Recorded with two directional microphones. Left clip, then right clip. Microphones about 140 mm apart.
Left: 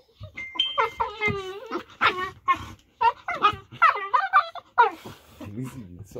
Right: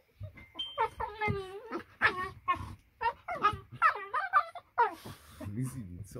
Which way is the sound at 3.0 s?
15° right (ahead or behind).